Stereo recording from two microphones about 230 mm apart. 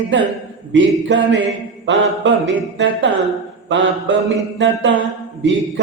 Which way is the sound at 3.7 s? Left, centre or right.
Right.